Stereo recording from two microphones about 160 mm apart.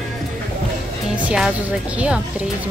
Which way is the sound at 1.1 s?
5° right (ahead or behind).